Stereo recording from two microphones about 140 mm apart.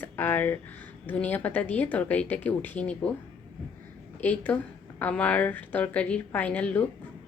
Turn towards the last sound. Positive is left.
turn(degrees=10)  # may be behind; listen again after turning